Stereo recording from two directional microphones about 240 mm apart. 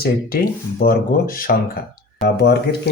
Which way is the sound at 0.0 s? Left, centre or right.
Left.